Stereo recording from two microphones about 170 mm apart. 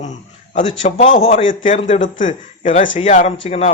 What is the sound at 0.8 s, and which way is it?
A man's voice, 45° left (ahead or behind).